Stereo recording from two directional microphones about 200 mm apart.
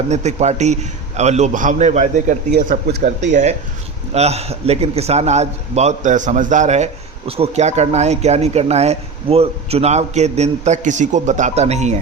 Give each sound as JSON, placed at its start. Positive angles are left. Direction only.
{"t": 0.1, "sound": "a man's voice", "side_deg": -35}
{"t": 2.5, "sound": "a man's voice", "side_deg": -50}